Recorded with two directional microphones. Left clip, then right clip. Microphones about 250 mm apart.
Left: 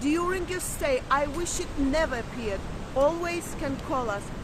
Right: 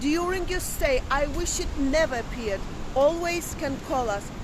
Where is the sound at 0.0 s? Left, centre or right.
Centre.